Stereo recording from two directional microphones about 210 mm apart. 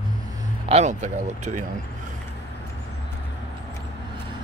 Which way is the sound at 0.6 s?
30° right (ahead or behind).